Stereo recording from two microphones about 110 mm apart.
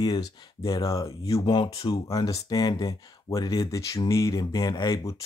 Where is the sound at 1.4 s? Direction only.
50° left (ahead or behind).